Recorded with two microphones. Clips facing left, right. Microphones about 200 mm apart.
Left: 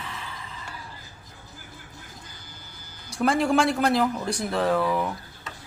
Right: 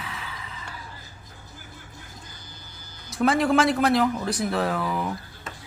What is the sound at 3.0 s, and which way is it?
Speech, centre (ahead or behind).